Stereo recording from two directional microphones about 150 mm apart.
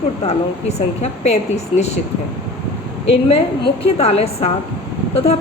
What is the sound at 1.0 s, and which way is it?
Speech, 45° left (ahead or behind).